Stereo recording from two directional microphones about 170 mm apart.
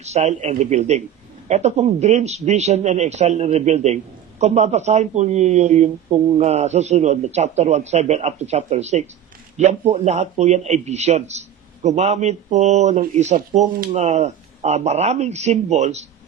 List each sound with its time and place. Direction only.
0.0 s speech: 40° right (ahead or behind)